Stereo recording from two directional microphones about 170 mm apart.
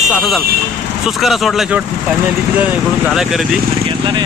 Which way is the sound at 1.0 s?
Centre (ahead or behind).